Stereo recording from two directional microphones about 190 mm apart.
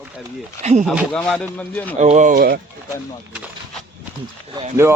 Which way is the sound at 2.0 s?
40° right (ahead or behind).